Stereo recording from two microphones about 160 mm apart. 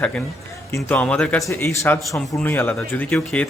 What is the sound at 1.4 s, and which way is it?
Speech, 20° left (ahead or behind).